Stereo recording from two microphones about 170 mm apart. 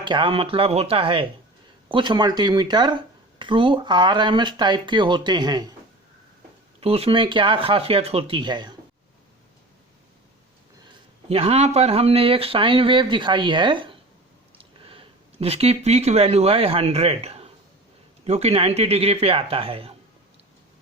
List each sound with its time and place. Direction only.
0.0 s speech: 30° right (ahead or behind)
6.7 s speech: 35° right (ahead or behind)
11.3 s speech: 35° right (ahead or behind)